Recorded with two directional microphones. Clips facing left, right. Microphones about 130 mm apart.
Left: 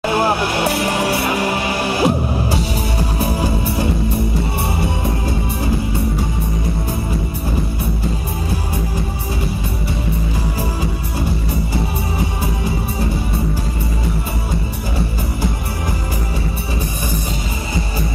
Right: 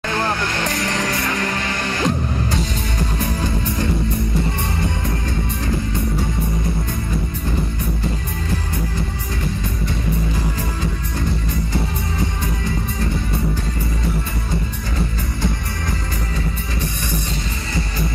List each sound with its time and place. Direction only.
0.0 s music: 15° left (ahead or behind)